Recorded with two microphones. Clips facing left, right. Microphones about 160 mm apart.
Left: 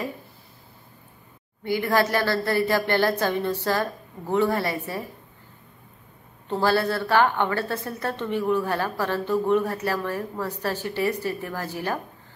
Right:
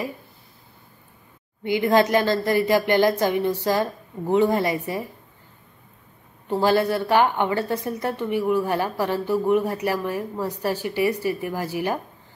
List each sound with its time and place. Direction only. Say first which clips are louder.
1.6 s a woman's voice: right 4 dB; 20° right (ahead or behind)
6.4 s a woman's voice: right 3 dB; 15° right (ahead or behind)